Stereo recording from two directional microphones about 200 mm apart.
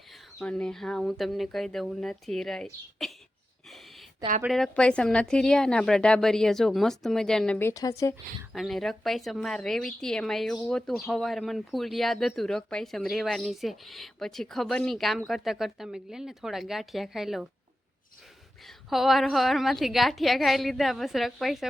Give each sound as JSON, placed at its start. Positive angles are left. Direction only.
{"t": 0.1, "sound": "a woman's voice", "side_deg": 0}
{"t": 3.7, "sound": "a sound", "side_deg": 0}
{"t": 4.4, "sound": "a woman's voice", "side_deg": 0}
{"t": 7.7, "sound": "speech", "side_deg": 15}
{"t": 8.5, "sound": "a woman's voice", "side_deg": 0}
{"t": 18.6, "sound": "a woman's voice", "side_deg": 0}